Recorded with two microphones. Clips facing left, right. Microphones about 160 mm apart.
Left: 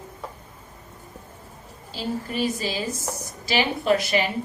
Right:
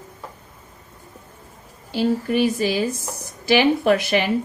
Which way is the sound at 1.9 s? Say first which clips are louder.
Right 8 dB; 60° right (ahead or behind).